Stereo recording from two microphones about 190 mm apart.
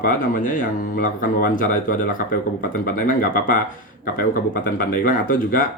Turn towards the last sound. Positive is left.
turn(degrees=45)  # may be behind; listen again after turning